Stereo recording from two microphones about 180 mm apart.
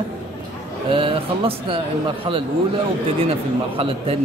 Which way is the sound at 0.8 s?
30° right (ahead or behind).